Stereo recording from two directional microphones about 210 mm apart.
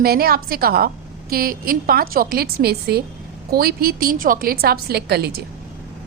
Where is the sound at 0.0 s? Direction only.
45° right (ahead or behind).